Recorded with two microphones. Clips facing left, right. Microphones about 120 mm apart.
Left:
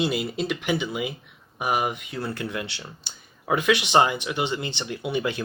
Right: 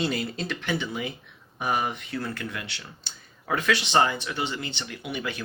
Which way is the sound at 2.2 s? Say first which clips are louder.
Left 6 dB; 25° left (ahead or behind).